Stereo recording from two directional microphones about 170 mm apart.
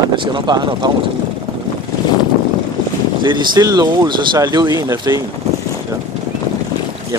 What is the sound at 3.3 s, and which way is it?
Speech, 25° right (ahead or behind).